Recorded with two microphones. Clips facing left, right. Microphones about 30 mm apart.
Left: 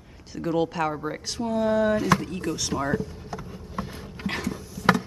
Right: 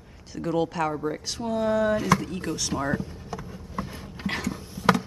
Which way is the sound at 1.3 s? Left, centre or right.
Centre.